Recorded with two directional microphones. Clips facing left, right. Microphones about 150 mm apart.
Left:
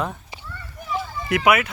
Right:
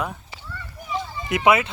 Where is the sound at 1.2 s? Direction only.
25° right (ahead or behind).